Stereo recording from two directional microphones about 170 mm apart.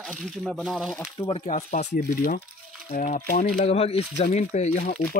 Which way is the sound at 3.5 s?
40° left (ahead or behind).